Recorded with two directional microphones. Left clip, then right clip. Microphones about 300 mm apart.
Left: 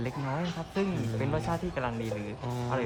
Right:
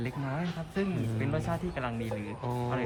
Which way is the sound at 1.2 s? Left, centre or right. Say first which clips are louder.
Left 2 dB; centre.